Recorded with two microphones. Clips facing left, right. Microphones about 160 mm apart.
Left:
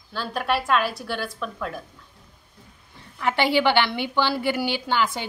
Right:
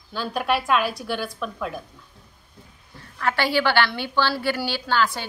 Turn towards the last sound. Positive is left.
turn(degrees=20)  # may be behind; listen again after turning